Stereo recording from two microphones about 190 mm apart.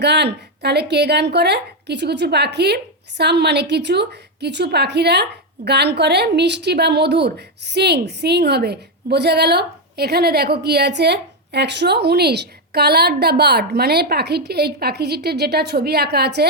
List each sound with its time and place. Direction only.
0.0 s a woman's voice: 60° right (ahead or behind)